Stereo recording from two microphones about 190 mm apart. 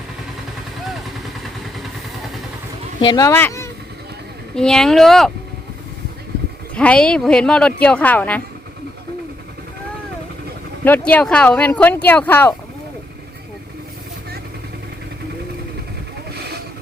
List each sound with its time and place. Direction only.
3.1 s speech: 15° left (ahead or behind); by 5.3 s centre (ahead or behind)
6.7 s speech: 5° left (ahead or behind)
10.8 s speech: 10° left (ahead or behind)